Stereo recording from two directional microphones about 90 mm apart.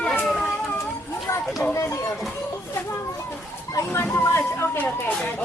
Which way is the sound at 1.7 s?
35° left (ahead or behind).